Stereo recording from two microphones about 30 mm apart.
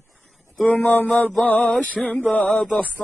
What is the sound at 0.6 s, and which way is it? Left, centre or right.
Music, left.